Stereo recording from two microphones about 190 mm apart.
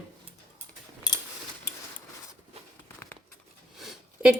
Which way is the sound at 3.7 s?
Centre (ahead or behind).